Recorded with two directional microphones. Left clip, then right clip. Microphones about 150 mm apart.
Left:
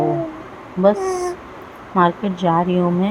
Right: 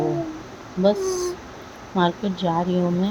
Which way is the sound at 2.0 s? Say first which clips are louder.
Left 6 dB; 5° left (ahead or behind).